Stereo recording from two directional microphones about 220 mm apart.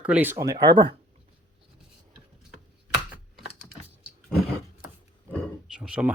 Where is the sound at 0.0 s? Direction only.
5° right (ahead or behind).